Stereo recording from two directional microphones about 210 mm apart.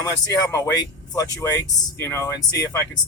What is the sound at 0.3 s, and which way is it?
Speech, 15° left (ahead or behind).